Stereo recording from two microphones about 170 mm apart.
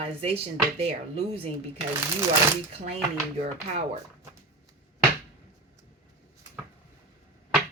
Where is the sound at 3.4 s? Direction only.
40° right (ahead or behind).